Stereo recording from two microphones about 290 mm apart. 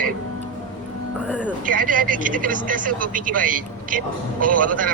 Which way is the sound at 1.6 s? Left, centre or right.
Right.